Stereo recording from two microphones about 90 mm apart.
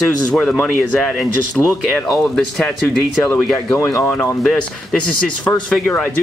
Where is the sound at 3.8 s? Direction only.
30° left (ahead or behind).